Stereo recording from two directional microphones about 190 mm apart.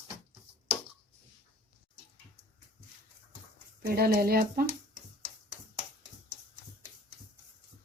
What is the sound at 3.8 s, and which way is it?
Speech, 55° right (ahead or behind).